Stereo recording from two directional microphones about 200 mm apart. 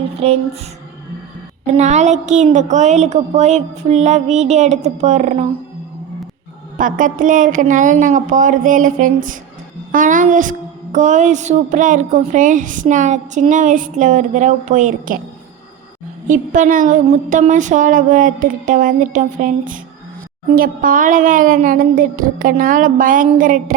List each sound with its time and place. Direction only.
0.2 s a woman's voice: 30° right (ahead or behind)
1.7 s a woman's voice: 35° right (ahead or behind)
6.7 s a woman's voice: 40° right (ahead or behind)
9.9 s a sound: 40° right (ahead or behind)
10.9 s a woman's voice: 40° right (ahead or behind)
16.2 s a woman's voice: 40° right (ahead or behind)